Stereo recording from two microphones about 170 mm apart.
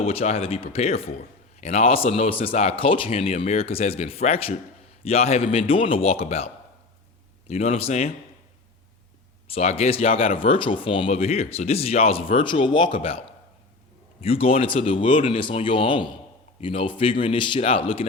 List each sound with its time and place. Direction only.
0.0 s speech: 35° left (ahead or behind)
9.5 s speech: 40° left (ahead or behind)